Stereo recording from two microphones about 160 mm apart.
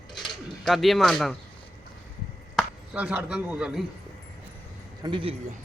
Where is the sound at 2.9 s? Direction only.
10° right (ahead or behind).